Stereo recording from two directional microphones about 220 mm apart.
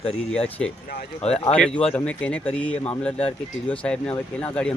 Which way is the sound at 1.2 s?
30° left (ahead or behind).